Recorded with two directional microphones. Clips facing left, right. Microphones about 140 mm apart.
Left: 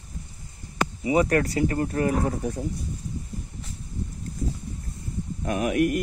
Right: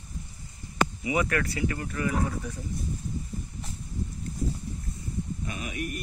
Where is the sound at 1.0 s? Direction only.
40° left (ahead or behind).